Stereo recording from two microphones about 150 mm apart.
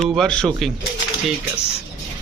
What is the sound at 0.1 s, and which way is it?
Speech, 5° left (ahead or behind).